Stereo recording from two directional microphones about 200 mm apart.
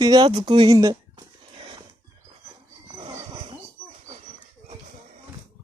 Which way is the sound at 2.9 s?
20° right (ahead or behind).